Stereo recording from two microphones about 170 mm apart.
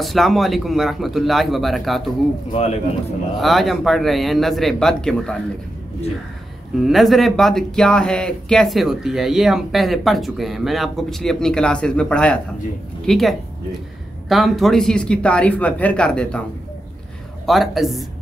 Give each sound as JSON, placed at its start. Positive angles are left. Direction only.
{"t": 0.0, "sound": "speech", "side_deg": 0}
{"t": 2.5, "sound": "speech", "side_deg": 40}
{"t": 3.3, "sound": "speech", "side_deg": 0}
{"t": 6.8, "sound": "speech", "side_deg": 0}
{"t": 17.5, "sound": "speech", "side_deg": 0}